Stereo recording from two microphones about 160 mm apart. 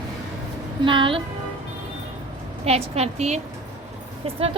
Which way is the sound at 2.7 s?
40° right (ahead or behind).